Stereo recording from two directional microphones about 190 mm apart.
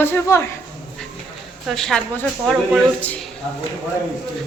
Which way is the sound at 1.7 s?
Centre (ahead or behind).